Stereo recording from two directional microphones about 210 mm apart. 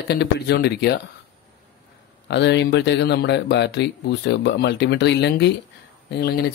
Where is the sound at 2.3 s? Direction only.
55° left (ahead or behind).